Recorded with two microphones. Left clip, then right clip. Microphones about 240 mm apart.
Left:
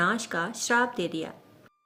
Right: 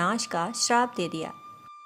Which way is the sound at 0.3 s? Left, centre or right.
Right.